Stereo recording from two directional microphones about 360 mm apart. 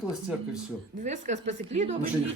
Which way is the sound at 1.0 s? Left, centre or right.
Centre.